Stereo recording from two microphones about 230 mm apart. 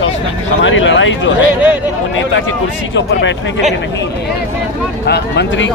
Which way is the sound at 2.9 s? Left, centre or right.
Left.